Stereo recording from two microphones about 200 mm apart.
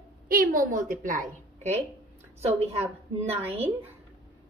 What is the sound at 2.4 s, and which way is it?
A woman's voice, 30° right (ahead or behind).